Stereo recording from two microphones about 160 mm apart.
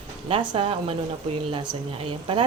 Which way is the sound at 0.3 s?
35° right (ahead or behind).